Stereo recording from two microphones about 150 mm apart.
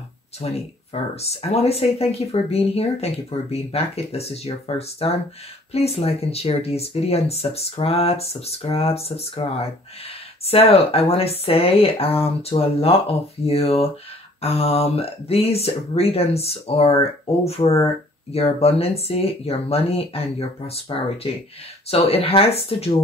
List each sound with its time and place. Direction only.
0.4 s speech: 45° left (ahead or behind)
18.3 s speech: 40° left (ahead or behind)